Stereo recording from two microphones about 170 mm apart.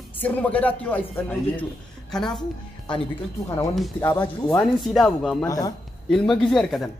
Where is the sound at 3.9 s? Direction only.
15° left (ahead or behind).